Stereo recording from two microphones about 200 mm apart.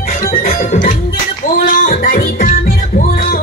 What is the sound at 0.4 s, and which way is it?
Music, 40° left (ahead or behind).